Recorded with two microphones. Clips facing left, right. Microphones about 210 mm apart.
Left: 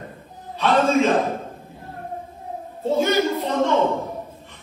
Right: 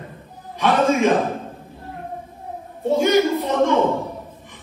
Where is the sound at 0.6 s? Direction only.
15° right (ahead or behind).